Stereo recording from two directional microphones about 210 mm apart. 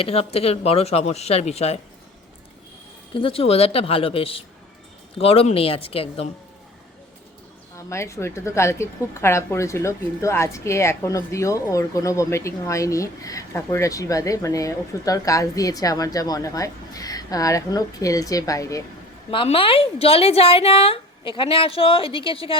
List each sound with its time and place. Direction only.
0.0 s a woman's voice: 30° left (ahead or behind)
3.2 s a woman's voice: 25° left (ahead or behind)
7.8 s a woman's voice: 15° left (ahead or behind)